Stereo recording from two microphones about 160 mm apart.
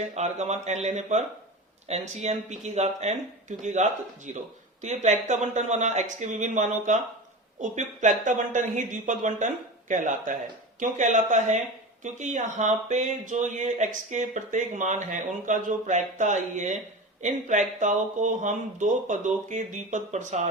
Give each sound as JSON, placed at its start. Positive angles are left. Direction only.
{"t": 0.2, "sound": "speech", "side_deg": -45}